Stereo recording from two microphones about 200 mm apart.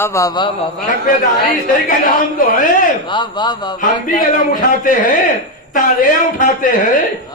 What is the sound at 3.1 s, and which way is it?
Speech, 20° left (ahead or behind).